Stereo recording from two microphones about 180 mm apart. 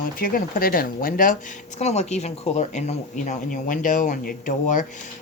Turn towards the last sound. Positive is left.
turn(degrees=45)  # may be behind; listen again after turning